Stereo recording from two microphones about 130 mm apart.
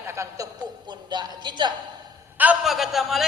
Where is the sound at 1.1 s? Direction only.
35° right (ahead or behind).